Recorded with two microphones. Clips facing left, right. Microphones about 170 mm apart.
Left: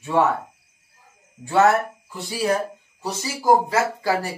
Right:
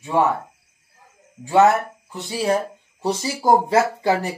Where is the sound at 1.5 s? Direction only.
20° right (ahead or behind).